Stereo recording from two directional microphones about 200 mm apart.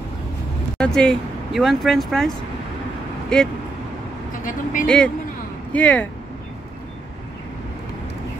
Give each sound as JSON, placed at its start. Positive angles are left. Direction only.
{"t": 0.7, "sound": "speech", "side_deg": 5}
{"t": 4.4, "sound": "speech", "side_deg": 40}
{"t": 4.8, "sound": "speech", "side_deg": 5}